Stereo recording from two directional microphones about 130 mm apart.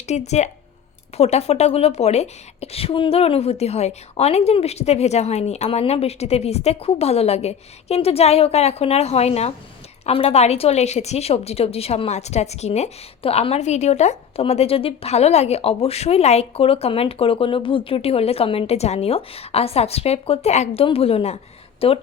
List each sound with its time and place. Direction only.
0.1 s a woman's voice: 60° left (ahead or behind)